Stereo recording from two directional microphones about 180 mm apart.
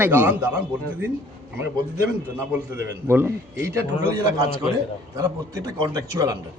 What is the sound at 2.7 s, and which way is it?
A man's voice, 15° right (ahead or behind).